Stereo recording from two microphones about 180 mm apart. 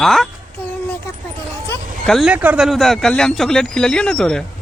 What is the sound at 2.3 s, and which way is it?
Speech, 10° right (ahead or behind).